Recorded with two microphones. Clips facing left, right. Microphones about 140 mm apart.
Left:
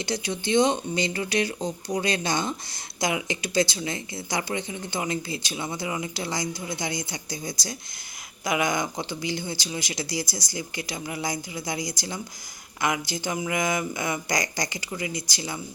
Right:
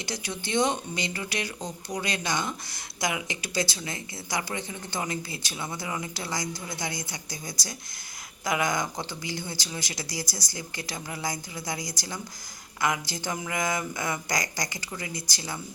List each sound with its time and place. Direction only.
0.0 s speech: 25° left (ahead or behind)